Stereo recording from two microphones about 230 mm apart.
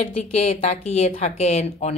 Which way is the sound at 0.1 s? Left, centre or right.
Left.